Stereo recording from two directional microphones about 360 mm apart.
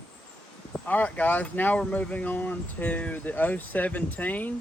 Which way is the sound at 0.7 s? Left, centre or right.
Centre.